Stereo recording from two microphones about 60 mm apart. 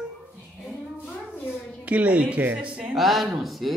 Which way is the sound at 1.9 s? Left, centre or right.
Right.